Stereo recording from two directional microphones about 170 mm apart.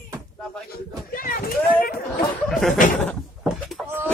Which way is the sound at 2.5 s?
Centre (ahead or behind).